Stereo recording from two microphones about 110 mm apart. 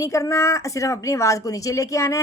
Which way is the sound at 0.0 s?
30° left (ahead or behind).